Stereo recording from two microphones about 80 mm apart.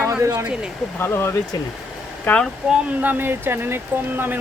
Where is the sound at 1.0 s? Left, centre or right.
Left.